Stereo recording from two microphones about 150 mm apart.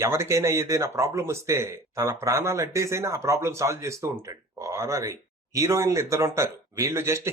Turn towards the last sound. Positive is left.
turn(degrees=-20)  # may be behind; listen again after turning